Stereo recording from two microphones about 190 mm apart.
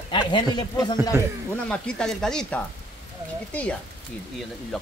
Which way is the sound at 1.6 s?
5° left (ahead or behind).